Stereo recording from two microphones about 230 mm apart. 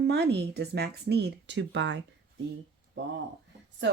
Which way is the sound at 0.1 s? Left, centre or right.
Right.